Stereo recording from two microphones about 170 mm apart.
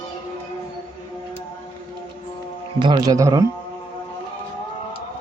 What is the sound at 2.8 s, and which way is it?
Speech, 25° right (ahead or behind).